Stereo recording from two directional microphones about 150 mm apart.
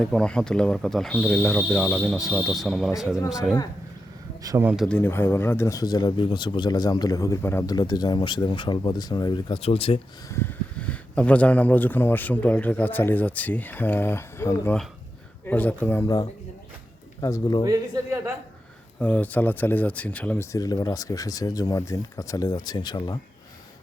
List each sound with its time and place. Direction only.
0.0 s speech: 5° left (ahead or behind)
4.6 s speech: 5° right (ahead or behind)
4.9 s speech: 10° left (ahead or behind); by 10.0 s 40° left (ahead or behind)
10.2 s speech: 20° left (ahead or behind)
10.8 s speech: 10° left (ahead or behind)
17.2 s speech: 25° left (ahead or behind)
17.6 s speech: 25° right (ahead or behind)
18.9 s speech: 10° left (ahead or behind); by 23.2 s 30° left (ahead or behind)